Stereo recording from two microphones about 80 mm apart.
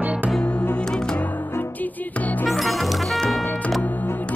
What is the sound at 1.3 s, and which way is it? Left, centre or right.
Music, left.